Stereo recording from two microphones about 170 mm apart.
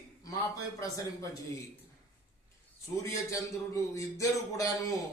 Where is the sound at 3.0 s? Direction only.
20° left (ahead or behind).